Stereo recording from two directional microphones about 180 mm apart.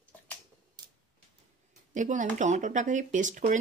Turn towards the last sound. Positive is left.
turn(degrees=-45)  # may be behind; listen again after turning